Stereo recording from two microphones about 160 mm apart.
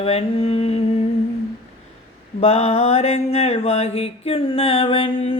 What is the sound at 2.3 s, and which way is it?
Mantra, 40° left (ahead or behind).